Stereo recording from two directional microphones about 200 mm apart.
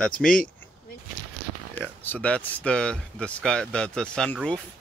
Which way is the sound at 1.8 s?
5° left (ahead or behind).